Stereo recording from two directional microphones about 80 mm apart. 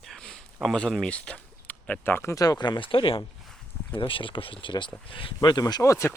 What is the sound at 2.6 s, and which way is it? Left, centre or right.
Speech, left.